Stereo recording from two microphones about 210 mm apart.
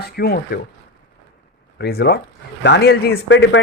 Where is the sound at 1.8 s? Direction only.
50° left (ahead or behind).